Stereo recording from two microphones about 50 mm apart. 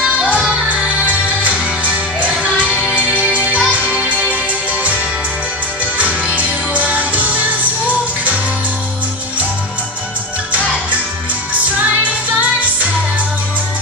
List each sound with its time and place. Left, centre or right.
0.4 s music: right
5.9 s music: right